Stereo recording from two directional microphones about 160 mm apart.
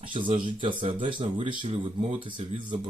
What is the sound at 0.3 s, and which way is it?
Speech, 30° right (ahead or behind).